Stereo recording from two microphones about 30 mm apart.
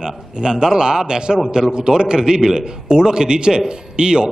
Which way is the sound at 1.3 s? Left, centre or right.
Centre.